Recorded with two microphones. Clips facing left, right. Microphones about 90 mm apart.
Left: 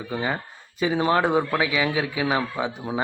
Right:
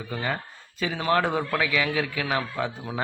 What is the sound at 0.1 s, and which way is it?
A man's voice, 15° left (ahead or behind).